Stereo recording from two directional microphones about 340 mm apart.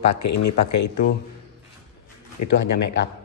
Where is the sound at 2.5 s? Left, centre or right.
Left.